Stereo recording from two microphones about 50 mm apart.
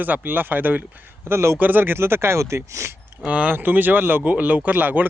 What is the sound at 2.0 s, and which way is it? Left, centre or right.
Speech, right.